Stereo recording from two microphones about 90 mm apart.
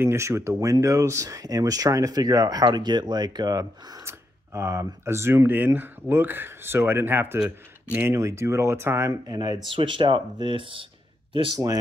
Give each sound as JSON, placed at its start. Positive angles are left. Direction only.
{"t": 0.0, "sound": "speech", "side_deg": -30}
{"t": 4.6, "sound": "speech", "side_deg": -30}
{"t": 8.1, "sound": "speech", "side_deg": -30}
{"t": 9.3, "sound": "speech", "side_deg": -50}
{"t": 9.7, "sound": "speech", "side_deg": -70}